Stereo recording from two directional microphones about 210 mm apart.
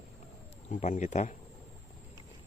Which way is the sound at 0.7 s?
35° left (ahead or behind).